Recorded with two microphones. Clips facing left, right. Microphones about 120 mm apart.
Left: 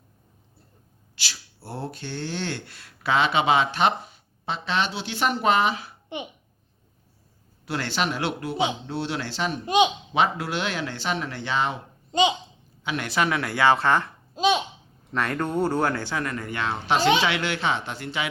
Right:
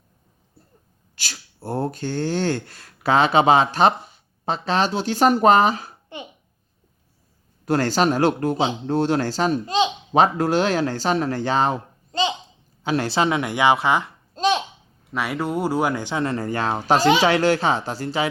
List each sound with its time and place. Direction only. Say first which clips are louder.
1.1 s speech: right 1 dB; 45° right (ahead or behind)
7.6 s speech: right 8 dB; 40° right (ahead or behind)
9.6 s speech: left 1 dB; 15° left (ahead or behind)
10.1 s speech: right 6 dB; 45° right (ahead or behind)
12.1 s a child's voice: left 2 dB; 20° left (ahead or behind)
12.8 s speech: right 5 dB; 35° right (ahead or behind); by 14.1 s 15° right (ahead or behind)
14.3 s a child's voice: right 1 dB; centre (ahead or behind)
15.1 s speech: right 1 dB; 10° right (ahead or behind)
16.2 s speech: right 6 dB; 35° right (ahead or behind)